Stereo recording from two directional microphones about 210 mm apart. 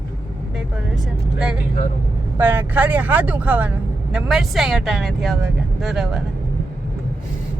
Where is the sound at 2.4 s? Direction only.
10° right (ahead or behind).